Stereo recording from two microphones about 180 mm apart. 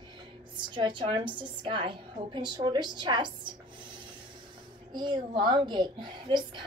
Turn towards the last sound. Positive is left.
turn(degrees=-25)  # may be behind; listen again after turning